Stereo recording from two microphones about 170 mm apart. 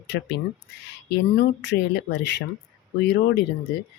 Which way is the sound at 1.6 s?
90° left.